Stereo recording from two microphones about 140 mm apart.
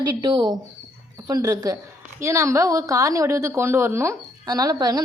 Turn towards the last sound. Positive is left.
turn(degrees=-30)  # may be behind; listen again after turning